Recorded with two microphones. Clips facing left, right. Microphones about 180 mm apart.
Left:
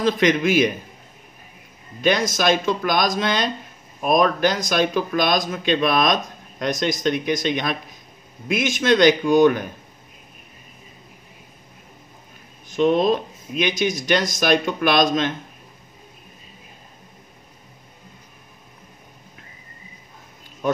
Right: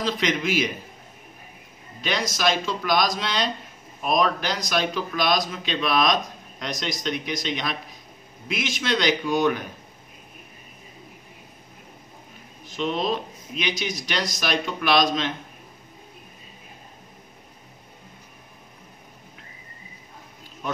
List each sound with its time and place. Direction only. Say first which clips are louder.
0.0 s speech: left 7 dB; 50° left (ahead or behind)
2.0 s speech: left 7 dB; 50° left (ahead or behind)
12.6 s speech: left 8 dB; 45° left (ahead or behind)